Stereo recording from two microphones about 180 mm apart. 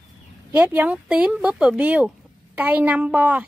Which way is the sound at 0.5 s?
10° right (ahead or behind).